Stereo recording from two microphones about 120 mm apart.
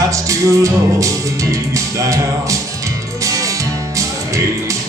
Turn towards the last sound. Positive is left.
turn(degrees=-25)  # may be behind; listen again after turning